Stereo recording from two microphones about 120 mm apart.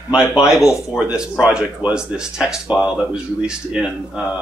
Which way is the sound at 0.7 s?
25° left (ahead or behind).